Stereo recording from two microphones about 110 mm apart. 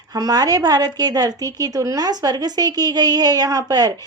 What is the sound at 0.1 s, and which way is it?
A woman's voice, 35° right (ahead or behind).